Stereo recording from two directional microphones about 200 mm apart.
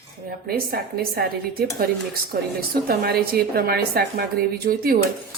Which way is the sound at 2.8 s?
50° right (ahead or behind).